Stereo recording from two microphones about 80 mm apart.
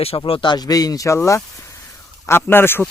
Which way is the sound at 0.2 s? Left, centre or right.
Left.